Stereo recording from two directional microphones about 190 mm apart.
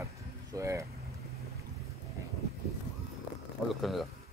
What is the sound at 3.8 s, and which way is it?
Speech, centre (ahead or behind).